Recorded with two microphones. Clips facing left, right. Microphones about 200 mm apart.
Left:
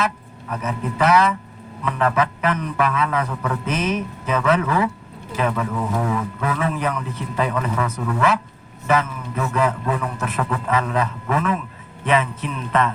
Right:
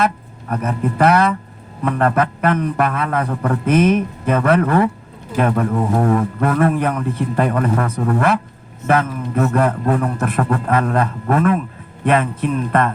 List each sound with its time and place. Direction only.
0.0 s a man's voice: 55° right (ahead or behind)